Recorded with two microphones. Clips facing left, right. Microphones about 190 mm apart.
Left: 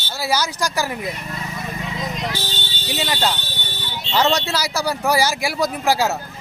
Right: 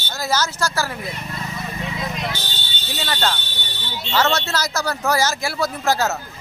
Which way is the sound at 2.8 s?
15° left (ahead or behind).